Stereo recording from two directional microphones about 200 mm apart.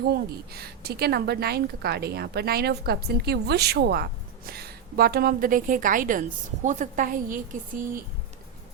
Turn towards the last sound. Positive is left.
turn(degrees=-45)  # may be behind; listen again after turning